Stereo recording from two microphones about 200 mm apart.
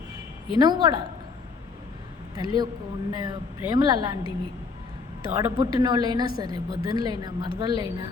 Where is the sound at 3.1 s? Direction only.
20° right (ahead or behind).